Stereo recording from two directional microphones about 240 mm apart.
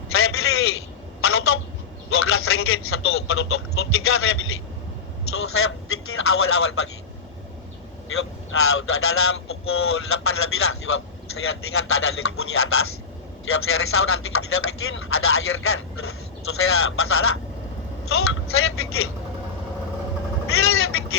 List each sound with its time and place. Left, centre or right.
0.1 s a sound: left
1.2 s telephone: left
2.0 s a man's voice: left
8.1 s speech: left
20.5 s speech: left